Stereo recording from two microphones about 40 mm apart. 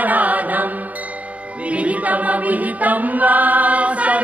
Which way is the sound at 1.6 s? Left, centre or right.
Right.